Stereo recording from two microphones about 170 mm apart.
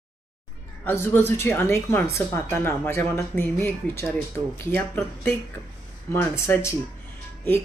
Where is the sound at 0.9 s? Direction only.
15° left (ahead or behind).